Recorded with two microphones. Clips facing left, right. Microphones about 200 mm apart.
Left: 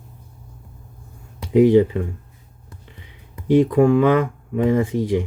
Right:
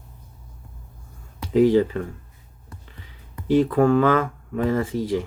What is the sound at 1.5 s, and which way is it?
Speech, 15° left (ahead or behind).